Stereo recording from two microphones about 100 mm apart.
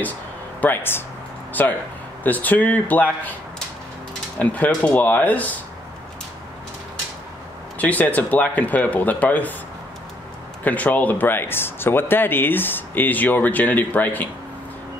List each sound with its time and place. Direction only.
0.6 s speech: 20° left (ahead or behind)
4.4 s speech: 15° left (ahead or behind)
7.8 s speech: 15° left (ahead or behind)
10.6 s speech: 15° left (ahead or behind)